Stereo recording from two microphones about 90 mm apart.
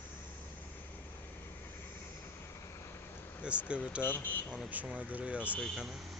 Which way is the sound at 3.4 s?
15° right (ahead or behind).